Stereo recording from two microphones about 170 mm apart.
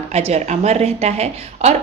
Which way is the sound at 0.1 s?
40° right (ahead or behind).